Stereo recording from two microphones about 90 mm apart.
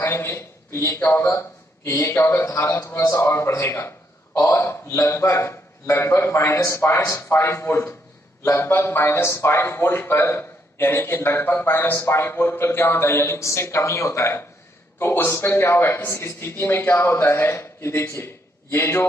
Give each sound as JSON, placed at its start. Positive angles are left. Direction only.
{"t": 0.0, "sound": "a man's voice", "side_deg": 25}